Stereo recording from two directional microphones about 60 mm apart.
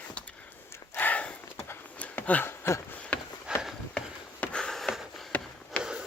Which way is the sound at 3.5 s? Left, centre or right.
Centre.